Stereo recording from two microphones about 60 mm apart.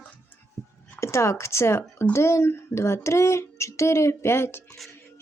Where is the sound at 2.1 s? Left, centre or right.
Left.